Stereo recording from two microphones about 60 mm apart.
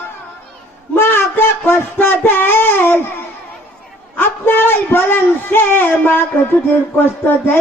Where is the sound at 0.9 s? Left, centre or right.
Left.